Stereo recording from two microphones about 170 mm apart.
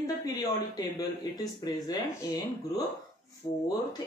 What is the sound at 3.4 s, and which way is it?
Speech, 20° left (ahead or behind).